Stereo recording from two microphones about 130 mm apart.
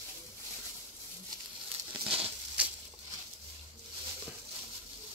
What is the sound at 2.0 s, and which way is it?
Crumpling, 45° right (ahead or behind).